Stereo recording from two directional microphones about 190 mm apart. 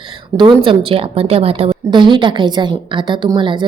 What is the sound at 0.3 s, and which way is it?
A woman's voice, 25° right (ahead or behind).